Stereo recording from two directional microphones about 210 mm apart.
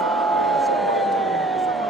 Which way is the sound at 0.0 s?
Centre (ahead or behind).